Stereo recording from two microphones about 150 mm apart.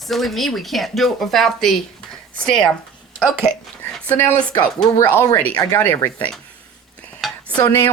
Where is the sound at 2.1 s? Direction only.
5° left (ahead or behind).